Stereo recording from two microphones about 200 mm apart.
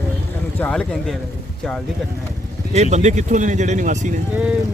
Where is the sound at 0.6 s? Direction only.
5° left (ahead or behind).